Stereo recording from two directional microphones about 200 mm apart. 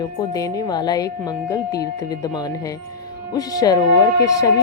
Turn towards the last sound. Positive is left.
turn(degrees=20)  # may be behind; listen again after turning